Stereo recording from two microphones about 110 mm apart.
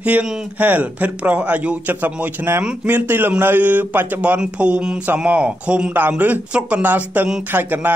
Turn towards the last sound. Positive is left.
turn(degrees=-15)  # may be behind; listen again after turning